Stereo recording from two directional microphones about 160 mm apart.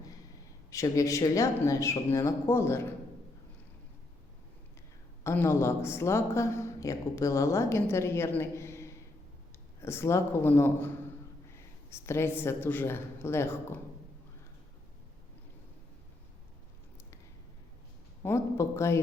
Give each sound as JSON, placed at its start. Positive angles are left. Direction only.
{"t": 0.7, "sound": "speech", "side_deg": 20}
{"t": 5.2, "sound": "a woman's voice", "side_deg": 15}
{"t": 18.2, "sound": "a woman's voice", "side_deg": 15}